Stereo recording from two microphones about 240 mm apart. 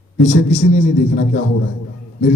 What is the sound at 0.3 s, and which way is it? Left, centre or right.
A man's voice, left.